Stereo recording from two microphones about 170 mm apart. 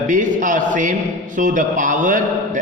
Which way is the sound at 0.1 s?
50° right (ahead or behind).